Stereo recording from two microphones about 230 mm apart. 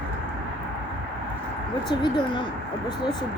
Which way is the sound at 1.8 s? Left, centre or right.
Centre.